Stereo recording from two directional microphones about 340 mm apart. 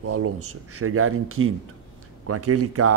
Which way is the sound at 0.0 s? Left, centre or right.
Right.